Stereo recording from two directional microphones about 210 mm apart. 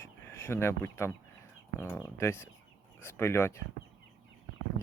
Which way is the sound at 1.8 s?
10° left (ahead or behind).